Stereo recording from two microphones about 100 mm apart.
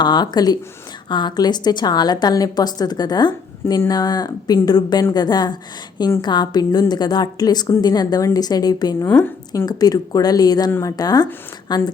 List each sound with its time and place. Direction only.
0.0 s a woman's voice: 45° left (ahead or behind)
9.0 s speech: 15° left (ahead or behind)
9.6 s a woman's voice: 40° left (ahead or behind)